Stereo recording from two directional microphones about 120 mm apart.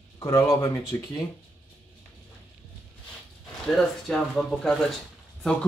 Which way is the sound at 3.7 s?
5° left (ahead or behind).